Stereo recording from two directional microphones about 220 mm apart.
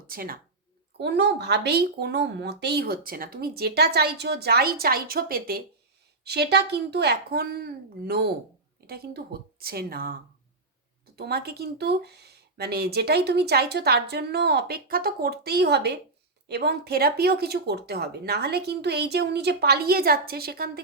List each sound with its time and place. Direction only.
0.1 s speech: 40° right (ahead or behind)
11.2 s speech: 45° right (ahead or behind)